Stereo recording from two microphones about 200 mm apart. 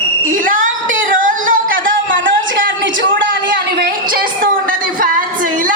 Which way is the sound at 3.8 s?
45° right (ahead or behind).